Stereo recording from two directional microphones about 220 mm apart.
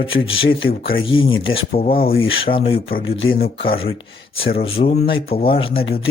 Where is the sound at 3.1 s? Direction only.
60° left (ahead or behind).